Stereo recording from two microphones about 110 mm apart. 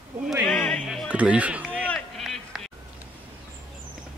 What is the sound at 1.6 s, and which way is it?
Run, 10° left (ahead or behind).